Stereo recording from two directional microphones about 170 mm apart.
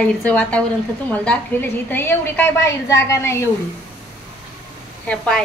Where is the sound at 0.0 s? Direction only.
10° left (ahead or behind).